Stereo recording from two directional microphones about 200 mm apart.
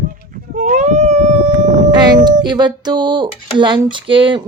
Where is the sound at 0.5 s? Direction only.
35° right (ahead or behind).